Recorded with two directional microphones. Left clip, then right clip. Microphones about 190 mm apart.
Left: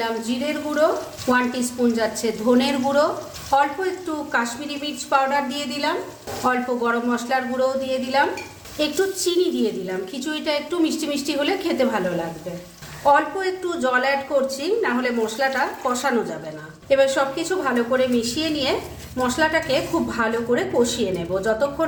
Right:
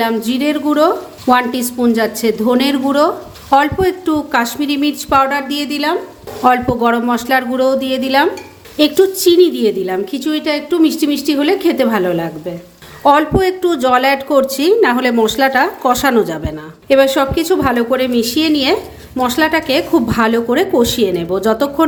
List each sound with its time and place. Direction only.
0.0 s a woman's voice: 50° right (ahead or behind)
13.1 s a woman's voice: 50° right (ahead or behind)